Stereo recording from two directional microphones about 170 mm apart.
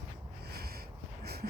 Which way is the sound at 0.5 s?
65° right (ahead or behind).